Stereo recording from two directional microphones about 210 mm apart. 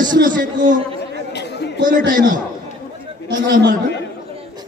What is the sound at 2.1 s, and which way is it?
Speech, 40° right (ahead or behind).